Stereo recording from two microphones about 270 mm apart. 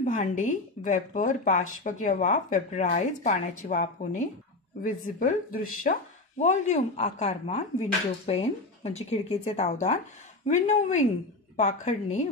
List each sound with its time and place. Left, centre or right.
0.0 s speech: left